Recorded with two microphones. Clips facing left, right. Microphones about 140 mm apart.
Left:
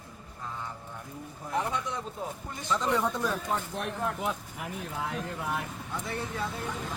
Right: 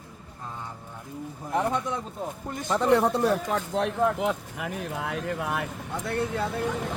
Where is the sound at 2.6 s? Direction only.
50° right (ahead or behind); by 6.7 s 70° right (ahead or behind).